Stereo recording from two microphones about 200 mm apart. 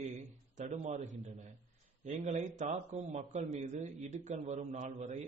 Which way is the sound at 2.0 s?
35° right (ahead or behind).